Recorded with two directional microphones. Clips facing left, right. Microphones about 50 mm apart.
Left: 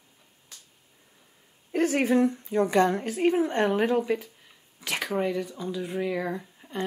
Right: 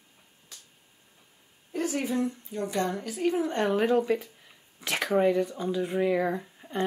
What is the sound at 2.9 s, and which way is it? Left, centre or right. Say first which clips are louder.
A woman's voice: left 4 dB; left.